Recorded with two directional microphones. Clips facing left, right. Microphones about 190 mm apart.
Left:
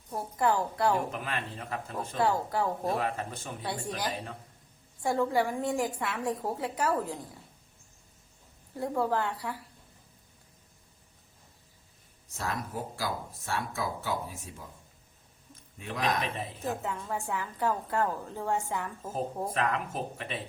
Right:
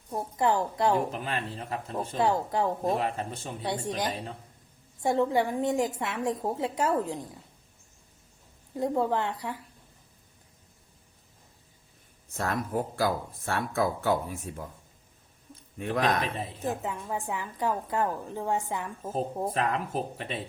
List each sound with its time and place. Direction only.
0.1 s a woman's voice: 20° right (ahead or behind)
8.7 s a woman's voice: 20° right (ahead or behind)
12.3 s speech: 55° right (ahead or behind)
16.0 s speech: 30° right (ahead or behind)
16.6 s a woman's voice: 15° right (ahead or behind)
19.5 s speech: 30° right (ahead or behind)